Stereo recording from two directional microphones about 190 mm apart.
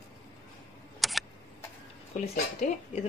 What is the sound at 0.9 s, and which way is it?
Camera, centre (ahead or behind).